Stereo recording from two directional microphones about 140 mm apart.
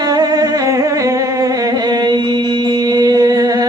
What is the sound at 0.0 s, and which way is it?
Humming, 30° right (ahead or behind).